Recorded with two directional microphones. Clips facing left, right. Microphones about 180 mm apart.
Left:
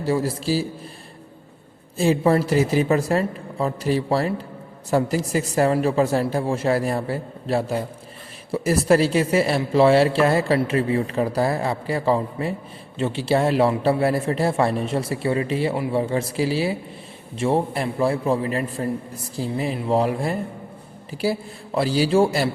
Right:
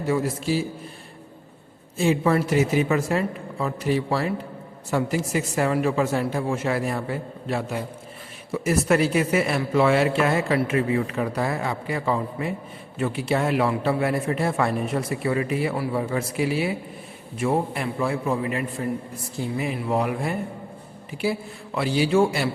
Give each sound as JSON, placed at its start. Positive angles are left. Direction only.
{"t": 0.0, "sound": "speech", "side_deg": 35}
{"t": 2.0, "sound": "a man's voice", "side_deg": 35}
{"t": 21.8, "sound": "speech", "side_deg": 35}